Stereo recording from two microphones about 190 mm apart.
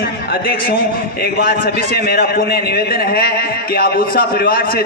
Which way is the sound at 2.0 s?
55° left (ahead or behind).